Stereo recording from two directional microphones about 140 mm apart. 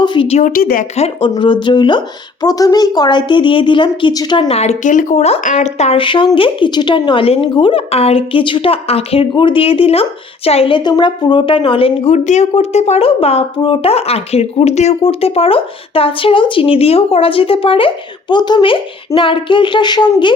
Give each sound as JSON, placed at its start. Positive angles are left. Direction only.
{"t": 0.0, "sound": "speech", "side_deg": 35}
{"t": 0.3, "sound": "speech", "side_deg": 55}
{"t": 0.5, "sound": "speech", "side_deg": 90}
{"t": 0.9, "sound": "speech", "side_deg": 45}
{"t": 1.3, "sound": "a woman's voice", "side_deg": 35}